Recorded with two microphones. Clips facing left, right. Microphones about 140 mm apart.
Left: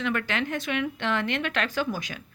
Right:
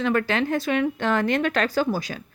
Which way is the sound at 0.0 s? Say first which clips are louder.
Right 6 dB; 35° right (ahead or behind).